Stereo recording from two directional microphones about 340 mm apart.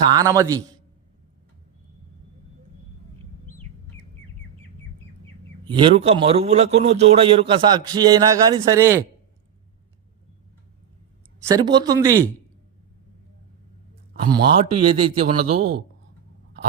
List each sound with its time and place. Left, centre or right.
0.1 s a man's voice: centre
5.7 s a man's voice: centre
11.4 s a man's voice: centre
14.3 s a man's voice: centre